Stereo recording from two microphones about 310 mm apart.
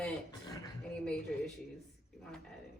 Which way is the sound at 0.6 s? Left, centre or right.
Centre.